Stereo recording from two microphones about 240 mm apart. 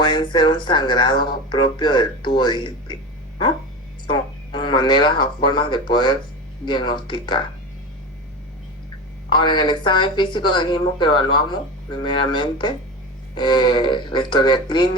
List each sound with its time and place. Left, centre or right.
0.0 s speech: centre
4.0 s speech: centre
9.3 s speech: centre